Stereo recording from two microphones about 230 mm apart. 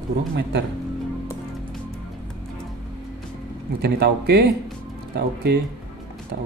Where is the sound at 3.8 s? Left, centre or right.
Right.